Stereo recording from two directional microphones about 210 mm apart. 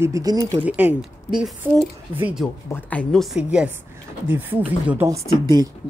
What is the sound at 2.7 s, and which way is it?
A woman's voice, 5° left (ahead or behind).